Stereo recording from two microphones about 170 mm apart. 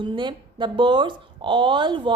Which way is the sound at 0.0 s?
25° right (ahead or behind).